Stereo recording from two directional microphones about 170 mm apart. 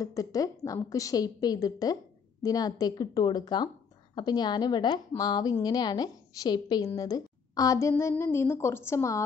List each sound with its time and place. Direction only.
0.0 s a woman's voice: 20° left (ahead or behind)